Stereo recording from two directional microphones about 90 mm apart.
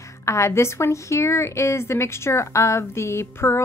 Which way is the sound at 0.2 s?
30° left (ahead or behind).